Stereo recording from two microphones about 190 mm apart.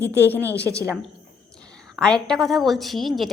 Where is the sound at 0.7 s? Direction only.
15° right (ahead or behind).